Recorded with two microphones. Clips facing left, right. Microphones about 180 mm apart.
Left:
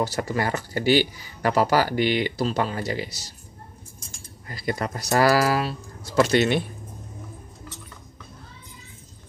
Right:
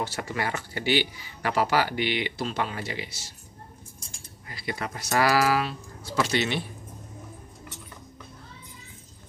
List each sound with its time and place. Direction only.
0.0 s speech: 40° left (ahead or behind)
4.5 s speech: 40° left (ahead or behind)
6.1 s speech: 50° left (ahead or behind)